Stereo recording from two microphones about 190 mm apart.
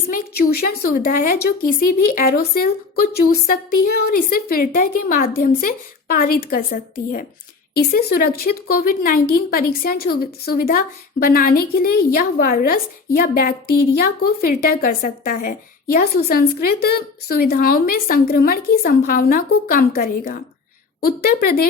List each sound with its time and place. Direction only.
0.1 s a woman's voice: 55° left (ahead or behind)